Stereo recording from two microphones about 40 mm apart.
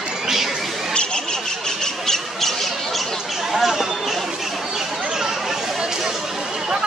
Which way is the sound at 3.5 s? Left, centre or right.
Centre.